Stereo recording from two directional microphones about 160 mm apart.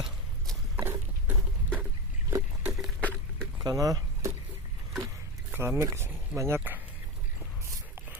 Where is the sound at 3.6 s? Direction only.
20° right (ahead or behind).